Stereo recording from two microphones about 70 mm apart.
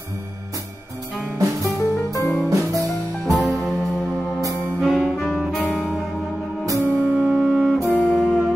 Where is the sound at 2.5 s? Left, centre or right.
Right.